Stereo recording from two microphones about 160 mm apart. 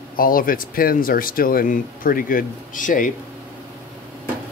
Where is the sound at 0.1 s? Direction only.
60° left (ahead or behind).